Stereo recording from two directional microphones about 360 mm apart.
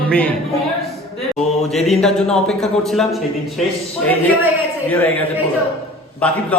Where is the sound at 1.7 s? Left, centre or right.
Centre.